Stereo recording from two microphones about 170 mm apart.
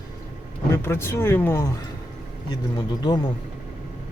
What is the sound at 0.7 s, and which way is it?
Speech, 15° left (ahead or behind).